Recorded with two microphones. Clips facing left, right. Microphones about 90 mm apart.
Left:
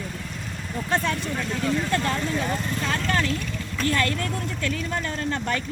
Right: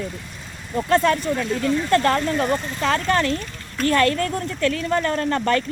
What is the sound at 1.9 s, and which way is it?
Speech, 65° right (ahead or behind).